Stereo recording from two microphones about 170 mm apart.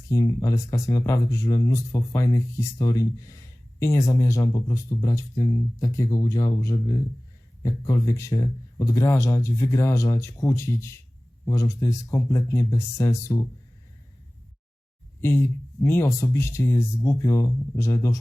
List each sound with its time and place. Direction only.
0.1 s speech: 20° left (ahead or behind)
7.6 s speech: 20° left (ahead or behind)
15.2 s speech: 15° left (ahead or behind)